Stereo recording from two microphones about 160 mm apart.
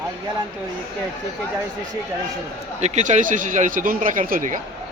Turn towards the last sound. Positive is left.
turn(degrees=-55)  # may be behind; listen again after turning